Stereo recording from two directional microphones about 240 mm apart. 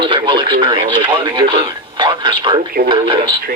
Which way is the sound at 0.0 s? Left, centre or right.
Right.